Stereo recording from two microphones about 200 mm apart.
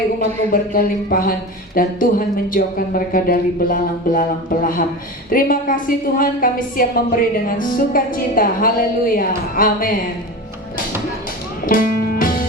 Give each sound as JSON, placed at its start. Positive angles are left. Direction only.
{"t": 0.2, "sound": "a woman's voice", "side_deg": 45}
{"t": 5.3, "sound": "a woman's voice", "side_deg": 45}
{"t": 11.6, "sound": "music", "side_deg": 45}